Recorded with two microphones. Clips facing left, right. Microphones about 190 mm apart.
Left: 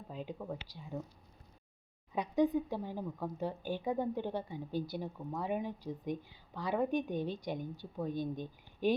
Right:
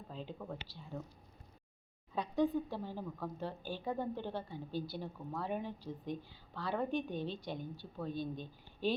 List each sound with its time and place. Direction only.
0.1 s speech: 10° left (ahead or behind)
2.1 s speech: 20° left (ahead or behind)